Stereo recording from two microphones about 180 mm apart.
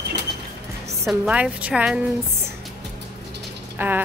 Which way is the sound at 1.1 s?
5° right (ahead or behind).